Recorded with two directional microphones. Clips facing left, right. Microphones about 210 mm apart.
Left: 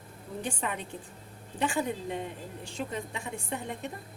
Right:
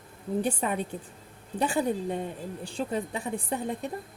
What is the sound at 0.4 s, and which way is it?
A woman's voice, 40° right (ahead or behind).